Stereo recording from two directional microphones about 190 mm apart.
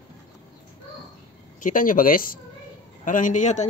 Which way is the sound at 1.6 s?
45° left (ahead or behind).